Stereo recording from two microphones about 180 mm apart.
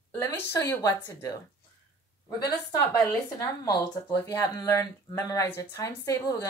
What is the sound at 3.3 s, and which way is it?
Speech, 20° left (ahead or behind).